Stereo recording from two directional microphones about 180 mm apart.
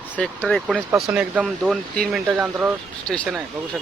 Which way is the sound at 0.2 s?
5° left (ahead or behind).